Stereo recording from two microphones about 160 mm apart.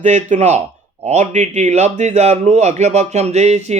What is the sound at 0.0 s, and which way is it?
A man's voice, 50° right (ahead or behind).